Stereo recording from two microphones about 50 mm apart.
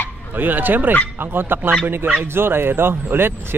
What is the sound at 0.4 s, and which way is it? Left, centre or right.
Speech, right.